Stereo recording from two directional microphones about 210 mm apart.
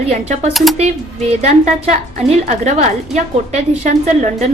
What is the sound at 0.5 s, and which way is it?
Speech, centre (ahead or behind).